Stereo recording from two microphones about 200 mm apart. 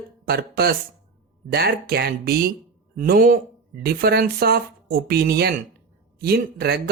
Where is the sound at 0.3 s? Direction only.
50° right (ahead or behind).